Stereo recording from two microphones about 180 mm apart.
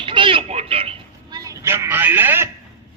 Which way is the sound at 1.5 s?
15° right (ahead or behind).